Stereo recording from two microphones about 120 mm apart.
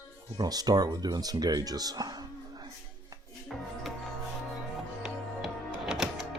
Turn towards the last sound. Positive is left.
turn(degrees=-5)  # may be behind; listen again after turning